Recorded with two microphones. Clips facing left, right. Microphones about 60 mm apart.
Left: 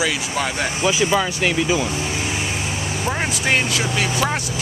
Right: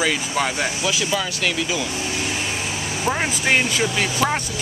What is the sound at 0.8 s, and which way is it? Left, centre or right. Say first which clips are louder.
Speech: left 8 dB; left.